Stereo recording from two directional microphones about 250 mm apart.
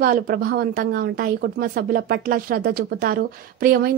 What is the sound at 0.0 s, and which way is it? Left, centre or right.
A woman's voice, right.